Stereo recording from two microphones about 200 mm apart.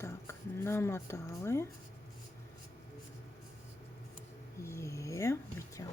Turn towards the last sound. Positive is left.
turn(degrees=15)  # may be behind; listen again after turning